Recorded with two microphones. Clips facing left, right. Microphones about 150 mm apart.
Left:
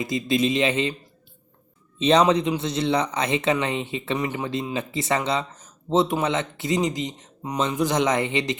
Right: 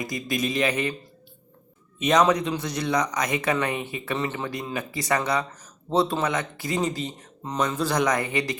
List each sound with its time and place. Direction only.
0.0 s a man's voice: 25° left (ahead or behind)
2.0 s a man's voice: 30° left (ahead or behind)